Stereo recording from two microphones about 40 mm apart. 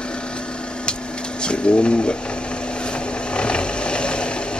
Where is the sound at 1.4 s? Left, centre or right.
Left.